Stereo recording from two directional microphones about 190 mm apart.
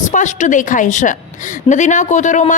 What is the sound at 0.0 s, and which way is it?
A woman's voice, 40° left (ahead or behind).